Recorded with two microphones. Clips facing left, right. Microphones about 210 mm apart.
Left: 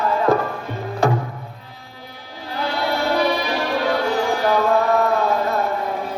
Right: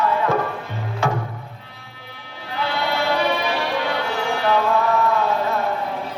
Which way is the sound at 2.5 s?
40° left (ahead or behind).